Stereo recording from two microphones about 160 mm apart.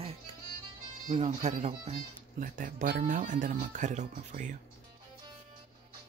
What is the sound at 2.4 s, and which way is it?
Speech, 55° right (ahead or behind).